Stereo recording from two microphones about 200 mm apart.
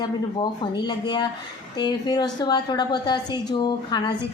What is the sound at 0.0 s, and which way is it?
A woman's voice, 20° left (ahead or behind).